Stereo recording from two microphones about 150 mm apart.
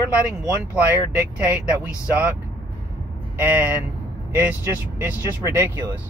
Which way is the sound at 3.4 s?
15° right (ahead or behind).